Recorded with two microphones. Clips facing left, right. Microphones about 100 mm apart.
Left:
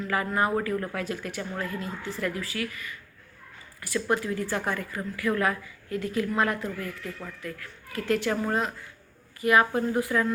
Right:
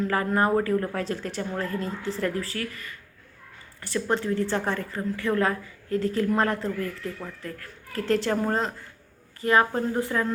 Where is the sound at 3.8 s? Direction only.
25° right (ahead or behind).